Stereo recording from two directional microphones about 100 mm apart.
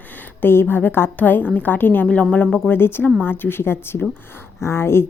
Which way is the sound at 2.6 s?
20° left (ahead or behind).